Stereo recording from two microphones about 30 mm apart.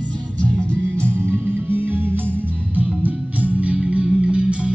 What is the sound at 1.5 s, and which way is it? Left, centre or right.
Music, right.